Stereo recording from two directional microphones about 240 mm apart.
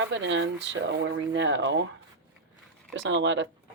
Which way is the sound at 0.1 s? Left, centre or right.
Right.